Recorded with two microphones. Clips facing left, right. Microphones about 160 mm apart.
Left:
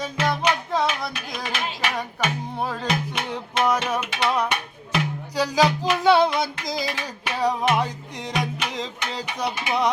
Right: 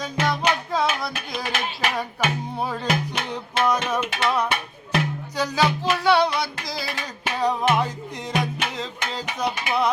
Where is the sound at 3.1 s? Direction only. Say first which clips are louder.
Even; 5° left (ahead or behind).